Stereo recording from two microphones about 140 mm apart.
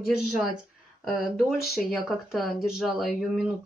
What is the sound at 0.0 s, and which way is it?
Speech, 5° right (ahead or behind).